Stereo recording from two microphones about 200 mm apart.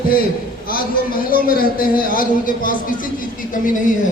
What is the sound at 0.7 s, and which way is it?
A man's voice, 45° left (ahead or behind).